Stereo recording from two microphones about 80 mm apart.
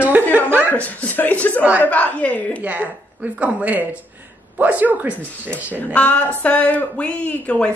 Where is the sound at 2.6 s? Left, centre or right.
Right.